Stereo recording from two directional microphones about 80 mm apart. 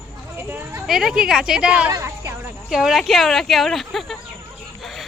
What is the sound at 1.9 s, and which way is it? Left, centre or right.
Speech, right.